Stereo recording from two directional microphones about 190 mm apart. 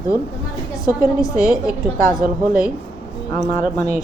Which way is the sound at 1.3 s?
5° right (ahead or behind).